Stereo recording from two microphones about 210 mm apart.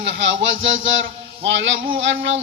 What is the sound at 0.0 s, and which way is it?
Speech, 60° right (ahead or behind).